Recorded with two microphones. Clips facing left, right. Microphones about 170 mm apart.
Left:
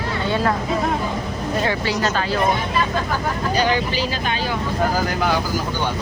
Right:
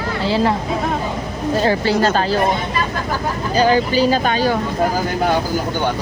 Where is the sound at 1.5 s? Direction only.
30° right (ahead or behind).